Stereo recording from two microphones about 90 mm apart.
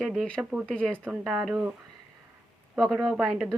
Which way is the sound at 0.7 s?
10° left (ahead or behind).